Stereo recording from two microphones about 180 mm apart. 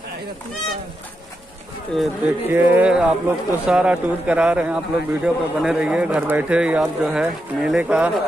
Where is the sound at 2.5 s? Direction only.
10° right (ahead or behind).